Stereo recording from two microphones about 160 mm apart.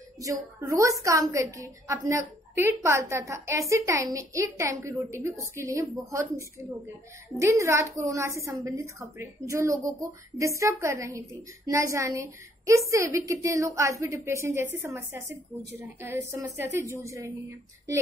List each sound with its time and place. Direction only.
0.2 s a woman's voice: 20° right (ahead or behind)